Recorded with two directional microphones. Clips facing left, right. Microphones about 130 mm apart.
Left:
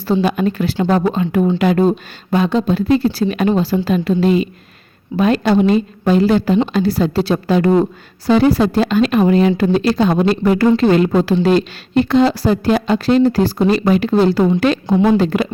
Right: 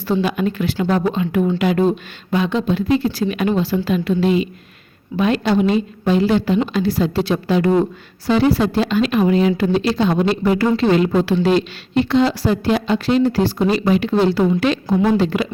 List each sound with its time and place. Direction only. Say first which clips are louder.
0.0 s speech: left 3 dB; 35° left (ahead or behind)